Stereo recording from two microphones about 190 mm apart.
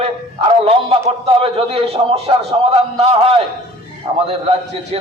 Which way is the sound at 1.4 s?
30° right (ahead or behind).